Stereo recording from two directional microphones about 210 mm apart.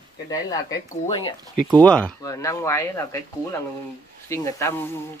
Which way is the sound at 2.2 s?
15° left (ahead or behind).